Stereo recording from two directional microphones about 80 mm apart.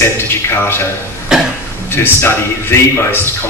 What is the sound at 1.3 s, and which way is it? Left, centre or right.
Cough, centre.